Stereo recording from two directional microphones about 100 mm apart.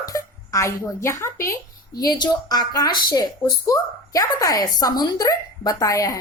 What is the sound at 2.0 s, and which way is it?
A woman's voice, 45° left (ahead or behind).